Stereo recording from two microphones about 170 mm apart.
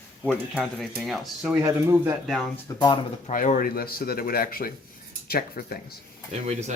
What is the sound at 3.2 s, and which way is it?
Speech, 50° left (ahead or behind).